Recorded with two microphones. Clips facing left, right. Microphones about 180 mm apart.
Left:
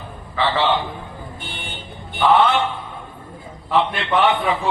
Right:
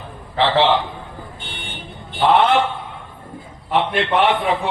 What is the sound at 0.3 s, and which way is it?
Speech, 70° right (ahead or behind).